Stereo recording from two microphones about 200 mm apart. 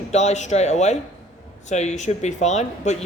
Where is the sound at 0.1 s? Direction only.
35° left (ahead or behind).